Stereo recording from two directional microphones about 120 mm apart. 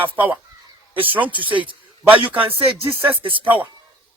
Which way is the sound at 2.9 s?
15° right (ahead or behind).